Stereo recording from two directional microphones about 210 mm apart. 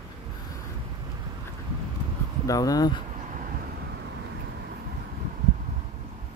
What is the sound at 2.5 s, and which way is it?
Speech, 15° left (ahead or behind).